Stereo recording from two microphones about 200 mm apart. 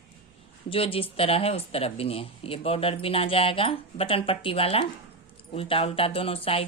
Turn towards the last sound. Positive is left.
turn(degrees=30)  # may be behind; listen again after turning